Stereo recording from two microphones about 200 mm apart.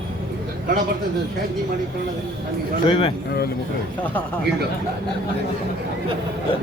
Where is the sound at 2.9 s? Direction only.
25° left (ahead or behind).